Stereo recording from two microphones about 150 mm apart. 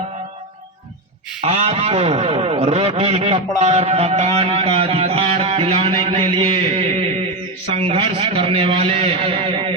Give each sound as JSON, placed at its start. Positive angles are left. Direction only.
{"t": 1.4, "sound": "music", "side_deg": -40}
{"t": 7.9, "sound": "a man's voice", "side_deg": -40}